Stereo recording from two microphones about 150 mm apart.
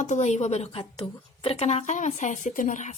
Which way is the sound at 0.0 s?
50° left (ahead or behind).